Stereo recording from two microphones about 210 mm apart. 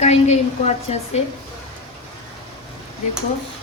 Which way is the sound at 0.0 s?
30° left (ahead or behind).